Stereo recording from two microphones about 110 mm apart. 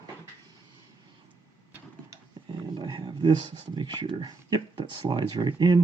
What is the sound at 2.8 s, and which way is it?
Speech, 40° right (ahead or behind).